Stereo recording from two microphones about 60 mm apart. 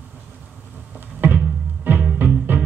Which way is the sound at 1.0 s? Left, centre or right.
Right.